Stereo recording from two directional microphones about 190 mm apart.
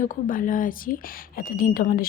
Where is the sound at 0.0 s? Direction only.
45° left (ahead or behind).